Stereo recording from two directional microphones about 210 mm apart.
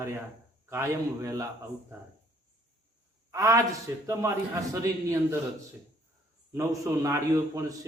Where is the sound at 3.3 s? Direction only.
15° right (ahead or behind).